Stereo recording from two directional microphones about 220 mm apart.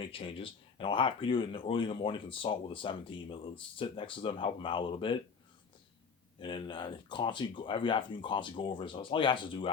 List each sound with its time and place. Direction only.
0.0 s speech: 25° left (ahead or behind)
6.4 s speech: 20° left (ahead or behind)